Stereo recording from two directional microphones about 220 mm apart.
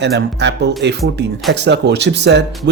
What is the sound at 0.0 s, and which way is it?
Speech, 50° right (ahead or behind).